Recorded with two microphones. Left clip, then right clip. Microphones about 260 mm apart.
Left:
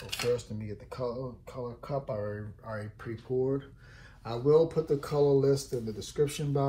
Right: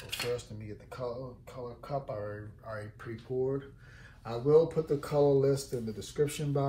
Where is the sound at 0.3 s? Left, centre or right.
Left.